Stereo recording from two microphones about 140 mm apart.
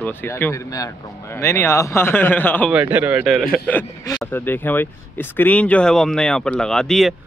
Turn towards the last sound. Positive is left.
turn(degrees=0)  # may be behind; listen again after turning